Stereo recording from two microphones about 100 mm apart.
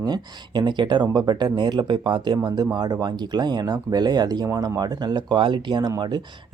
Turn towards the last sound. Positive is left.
turn(degrees=-45)  # may be behind; listen again after turning